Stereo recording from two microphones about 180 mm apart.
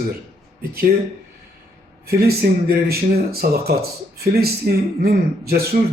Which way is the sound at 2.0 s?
60° right (ahead or behind).